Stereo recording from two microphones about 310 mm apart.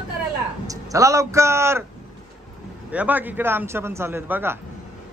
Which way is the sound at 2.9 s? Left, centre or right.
Centre.